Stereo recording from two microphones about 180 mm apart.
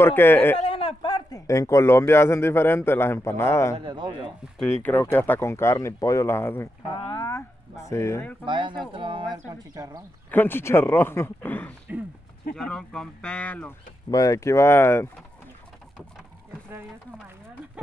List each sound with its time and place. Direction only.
0.0 s speech: 10° left (ahead or behind)
0.6 s a man's voice: 30° left (ahead or behind); by 3.7 s 15° left (ahead or behind)
3.7 s a man's voice: 25° right (ahead or behind)
4.8 s speech: 10° left (ahead or behind)
6.9 s speech: 25° left (ahead or behind)
8.5 s a man's voice: 25° right (ahead or behind)
10.3 s speech: 10° left (ahead or behind)
14.1 s speech: 20° left (ahead or behind)